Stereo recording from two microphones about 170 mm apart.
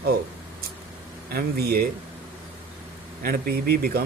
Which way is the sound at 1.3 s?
65° right (ahead or behind).